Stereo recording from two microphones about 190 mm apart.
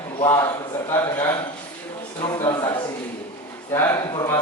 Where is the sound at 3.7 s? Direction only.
15° left (ahead or behind).